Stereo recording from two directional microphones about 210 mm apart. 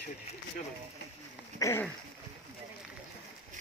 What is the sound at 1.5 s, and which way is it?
Speech, 15° left (ahead or behind).